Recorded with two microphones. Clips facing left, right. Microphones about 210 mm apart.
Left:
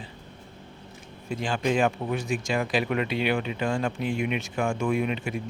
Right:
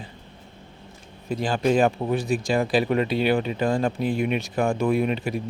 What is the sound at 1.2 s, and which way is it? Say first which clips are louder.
Speech: right 4 dB; 35° right (ahead or behind).